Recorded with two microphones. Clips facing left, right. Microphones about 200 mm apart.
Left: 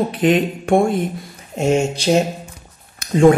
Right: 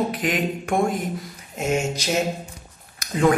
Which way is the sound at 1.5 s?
30° left (ahead or behind).